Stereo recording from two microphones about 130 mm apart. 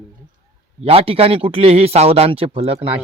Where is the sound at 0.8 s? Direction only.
50° right (ahead or behind).